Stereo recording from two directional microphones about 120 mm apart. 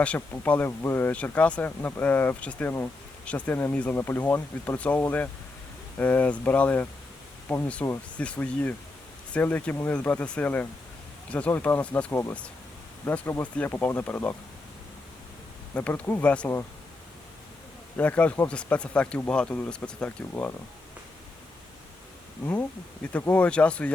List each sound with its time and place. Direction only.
0.0 s speech: 10° left (ahead or behind)
15.7 s speech: 15° left (ahead or behind)
17.9 s speech: 10° left (ahead or behind)
23.1 s speech: 15° left (ahead or behind)